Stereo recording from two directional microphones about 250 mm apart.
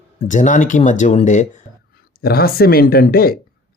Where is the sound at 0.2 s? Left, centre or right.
Left.